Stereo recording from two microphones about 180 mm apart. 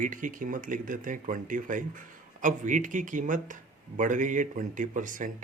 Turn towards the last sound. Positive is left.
turn(degrees=-45)  # may be behind; listen again after turning